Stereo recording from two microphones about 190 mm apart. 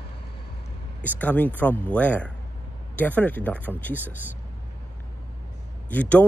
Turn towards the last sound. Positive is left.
turn(degrees=10)  # may be behind; listen again after turning